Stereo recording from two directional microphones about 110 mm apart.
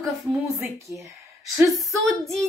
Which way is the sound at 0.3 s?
25° right (ahead or behind).